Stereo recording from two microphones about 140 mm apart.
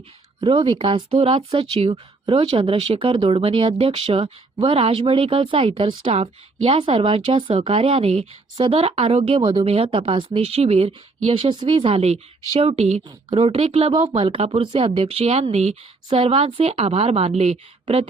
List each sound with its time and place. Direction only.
0.4 s speech: 40° right (ahead or behind)
6.0 s speech: 50° right (ahead or behind)